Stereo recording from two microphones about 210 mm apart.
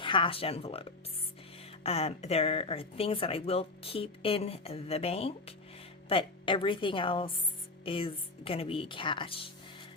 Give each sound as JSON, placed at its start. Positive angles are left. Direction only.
{"t": 0.0, "sound": "speech", "side_deg": 25}